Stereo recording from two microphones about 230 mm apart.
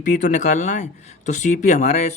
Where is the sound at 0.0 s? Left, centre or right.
Left.